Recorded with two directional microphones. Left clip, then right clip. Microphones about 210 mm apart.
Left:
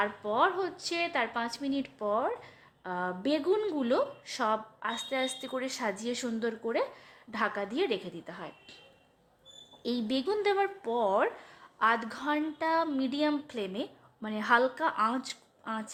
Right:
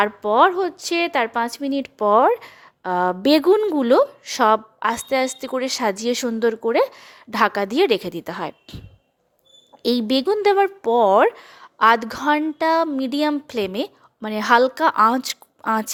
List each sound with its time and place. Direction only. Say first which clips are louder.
0.0 s a woman's voice: right 12 dB; 45° right (ahead or behind)
9.8 s speech: right 12 dB; 45° right (ahead or behind)